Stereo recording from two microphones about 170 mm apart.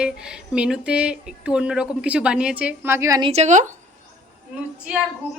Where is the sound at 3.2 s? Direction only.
35° right (ahead or behind).